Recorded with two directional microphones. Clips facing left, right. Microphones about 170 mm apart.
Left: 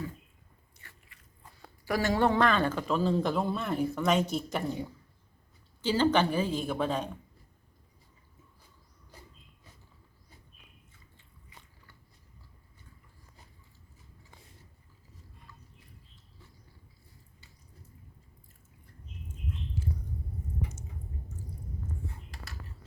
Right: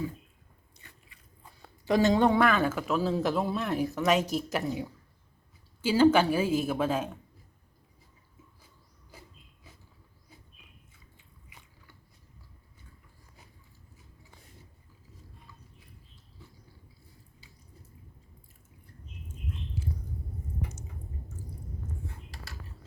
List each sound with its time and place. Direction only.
0.8 s biting: 20° right (ahead or behind)
1.8 s a man's voice: 20° right (ahead or behind); by 7.1 s 5° right (ahead or behind)